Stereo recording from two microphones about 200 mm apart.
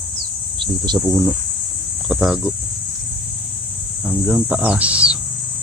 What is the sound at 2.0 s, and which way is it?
Speech, 5° right (ahead or behind).